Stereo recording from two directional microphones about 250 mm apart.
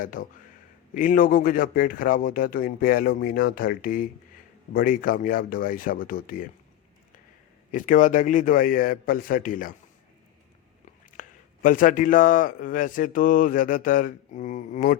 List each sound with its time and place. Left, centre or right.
0.0 s a man's voice: left
7.7 s a man's voice: left
11.2 s a man's voice: left